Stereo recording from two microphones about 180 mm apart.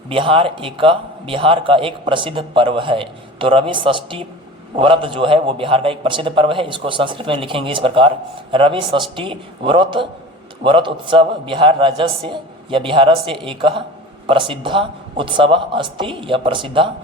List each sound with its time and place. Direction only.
0.1 s a man's voice: 30° right (ahead or behind)